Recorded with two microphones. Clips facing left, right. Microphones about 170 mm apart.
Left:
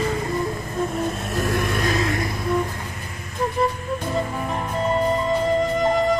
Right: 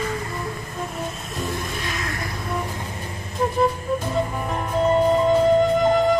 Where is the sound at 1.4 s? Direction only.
70° left (ahead or behind).